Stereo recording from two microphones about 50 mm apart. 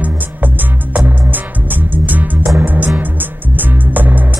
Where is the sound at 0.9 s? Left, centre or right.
Right.